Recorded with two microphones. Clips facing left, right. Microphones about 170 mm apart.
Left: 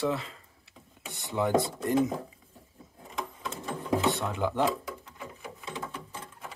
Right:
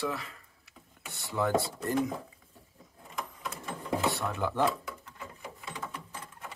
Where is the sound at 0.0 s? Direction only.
25° left (ahead or behind).